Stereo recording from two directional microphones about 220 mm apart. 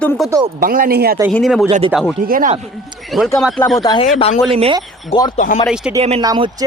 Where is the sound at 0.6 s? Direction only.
40° right (ahead or behind).